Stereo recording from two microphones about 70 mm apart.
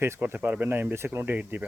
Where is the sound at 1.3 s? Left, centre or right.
Right.